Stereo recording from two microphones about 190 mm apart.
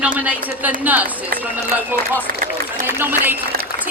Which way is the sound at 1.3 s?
50° right (ahead or behind).